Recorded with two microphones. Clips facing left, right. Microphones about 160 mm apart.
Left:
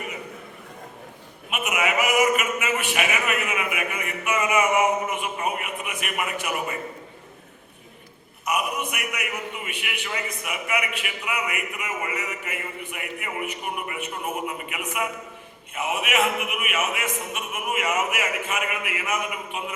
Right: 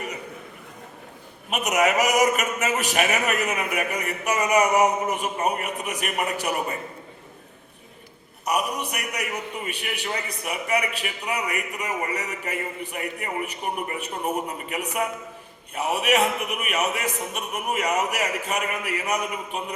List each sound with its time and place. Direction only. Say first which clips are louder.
1.5 s a man's voice: right 4 dB; 40° right (ahead or behind)
8.4 s a man's voice: right 1 dB; 35° right (ahead or behind)